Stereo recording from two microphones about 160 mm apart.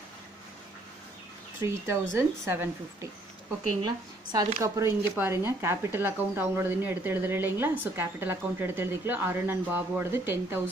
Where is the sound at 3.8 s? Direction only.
25° right (ahead or behind).